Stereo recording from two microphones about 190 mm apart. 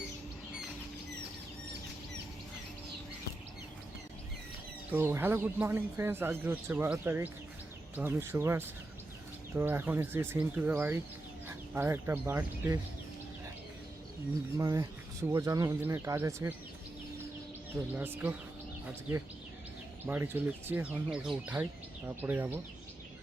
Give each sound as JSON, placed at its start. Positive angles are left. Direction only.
{"t": 4.9, "sound": "speech", "side_deg": -10}
{"t": 14.5, "sound": "speech", "side_deg": -20}
{"t": 17.9, "sound": "speech", "side_deg": -10}
{"t": 20.1, "sound": "speech", "side_deg": -10}